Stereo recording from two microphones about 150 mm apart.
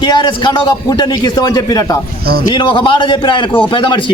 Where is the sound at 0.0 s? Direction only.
30° left (ahead or behind).